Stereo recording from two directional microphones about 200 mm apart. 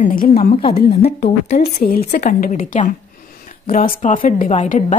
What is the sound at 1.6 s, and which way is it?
A woman's voice, 50° left (ahead or behind).